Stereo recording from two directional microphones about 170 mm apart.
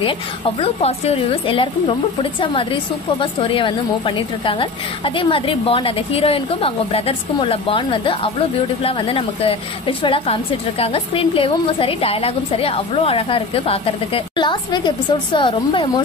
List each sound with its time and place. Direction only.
0.6 s a woman's voice: 40° left (ahead or behind)